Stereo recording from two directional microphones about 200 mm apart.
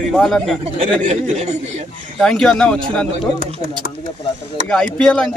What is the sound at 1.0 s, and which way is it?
Speech, 35° right (ahead or behind).